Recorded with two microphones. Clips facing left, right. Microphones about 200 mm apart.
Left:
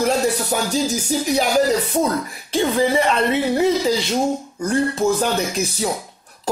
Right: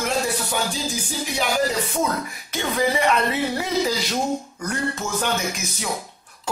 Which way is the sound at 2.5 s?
30° left (ahead or behind).